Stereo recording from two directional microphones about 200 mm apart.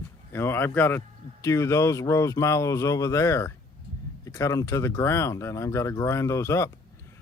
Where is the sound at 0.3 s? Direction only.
10° left (ahead or behind).